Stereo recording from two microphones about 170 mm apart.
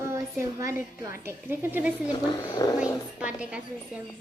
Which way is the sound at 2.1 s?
25° left (ahead or behind).